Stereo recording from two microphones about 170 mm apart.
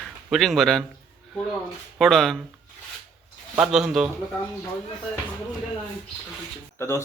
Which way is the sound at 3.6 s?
Centre (ahead or behind).